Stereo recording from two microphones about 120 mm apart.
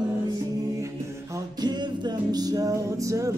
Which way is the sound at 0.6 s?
25° right (ahead or behind).